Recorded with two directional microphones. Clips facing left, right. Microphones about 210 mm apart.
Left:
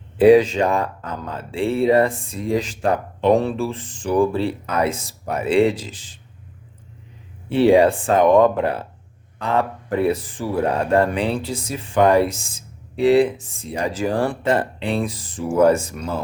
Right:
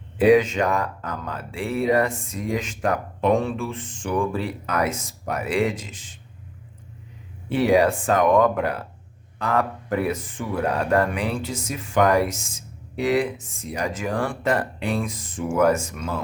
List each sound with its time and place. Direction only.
0.3 s speech: 30° left (ahead or behind)
7.6 s speech: 30° left (ahead or behind)